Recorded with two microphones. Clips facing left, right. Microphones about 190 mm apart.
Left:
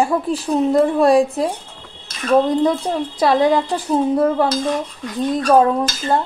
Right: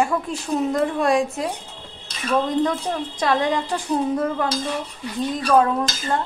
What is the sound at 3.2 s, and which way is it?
A woman's voice, 35° left (ahead or behind).